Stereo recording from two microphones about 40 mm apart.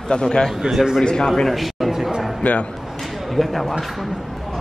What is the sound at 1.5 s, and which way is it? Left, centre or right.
Speech, centre.